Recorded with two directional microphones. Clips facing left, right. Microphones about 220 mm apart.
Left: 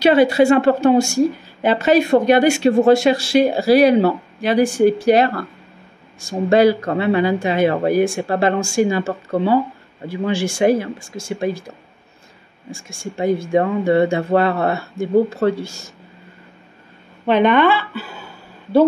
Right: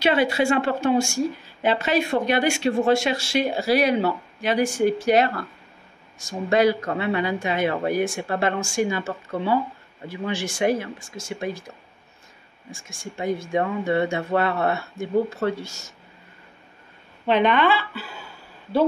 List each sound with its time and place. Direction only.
0.0 s speech: 40° left (ahead or behind)
13.0 s speech: 30° left (ahead or behind)
17.3 s speech: 50° left (ahead or behind)